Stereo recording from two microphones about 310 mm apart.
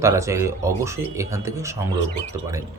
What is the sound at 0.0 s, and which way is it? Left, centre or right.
Speech, centre.